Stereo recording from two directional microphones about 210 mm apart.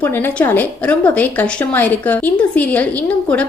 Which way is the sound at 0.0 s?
10° left (ahead or behind).